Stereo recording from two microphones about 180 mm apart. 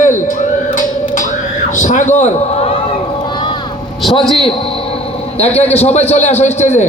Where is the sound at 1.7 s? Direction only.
45° left (ahead or behind).